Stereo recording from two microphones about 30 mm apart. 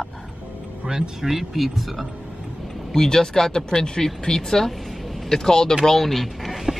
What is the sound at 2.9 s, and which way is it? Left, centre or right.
Speech, centre.